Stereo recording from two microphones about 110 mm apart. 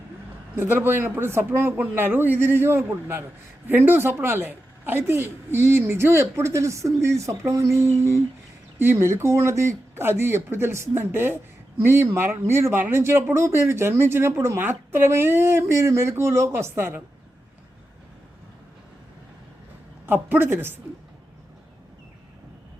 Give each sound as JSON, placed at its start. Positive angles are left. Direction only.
{"t": 0.5, "sound": "speech", "side_deg": -20}
{"t": 20.1, "sound": "a woman's voice", "side_deg": -20}